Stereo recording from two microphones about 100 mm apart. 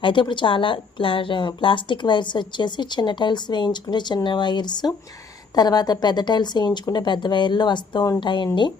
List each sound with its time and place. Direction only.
0.0 s a woman's voice: 55° left (ahead or behind)
8.2 s a woman's voice: 50° left (ahead or behind)